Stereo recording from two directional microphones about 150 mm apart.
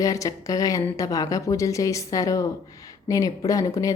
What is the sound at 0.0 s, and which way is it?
Speech, 20° left (ahead or behind).